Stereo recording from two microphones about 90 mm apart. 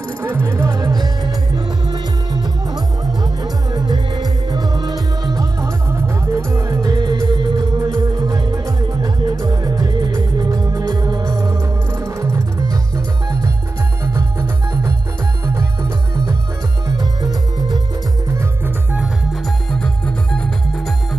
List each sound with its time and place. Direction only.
0.3 s music: 25° right (ahead or behind)
0.7 s music: 45° right (ahead or behind)
5.9 s music: 30° right (ahead or behind); by 11.3 s 45° right (ahead or behind)
12.0 s music: 30° right (ahead or behind)
16.8 s music: 45° right (ahead or behind)
19.7 s music: 10° left (ahead or behind)